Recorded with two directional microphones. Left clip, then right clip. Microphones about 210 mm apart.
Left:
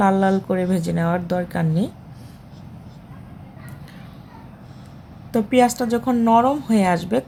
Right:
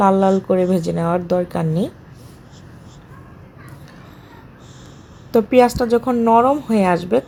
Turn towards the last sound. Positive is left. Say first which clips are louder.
# right 3 dB
turn(degrees=-5)  # may be behind; listen again after turning